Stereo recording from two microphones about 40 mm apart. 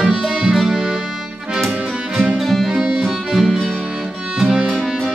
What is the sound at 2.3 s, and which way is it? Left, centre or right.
Music, centre.